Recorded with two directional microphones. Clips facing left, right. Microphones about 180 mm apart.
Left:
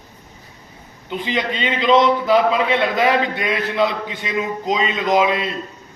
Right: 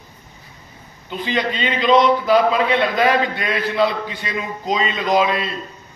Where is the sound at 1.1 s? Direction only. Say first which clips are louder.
Even; 20° left (ahead or behind).